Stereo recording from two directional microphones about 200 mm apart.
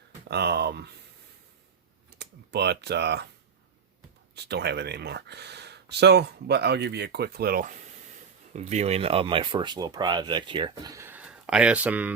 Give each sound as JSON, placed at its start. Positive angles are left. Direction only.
{"t": 0.3, "sound": "speech", "side_deg": -55}
{"t": 2.1, "sound": "speech", "side_deg": -55}
{"t": 4.4, "sound": "speech", "side_deg": -55}